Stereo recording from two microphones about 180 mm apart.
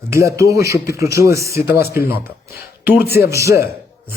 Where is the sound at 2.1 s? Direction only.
60° left (ahead or behind).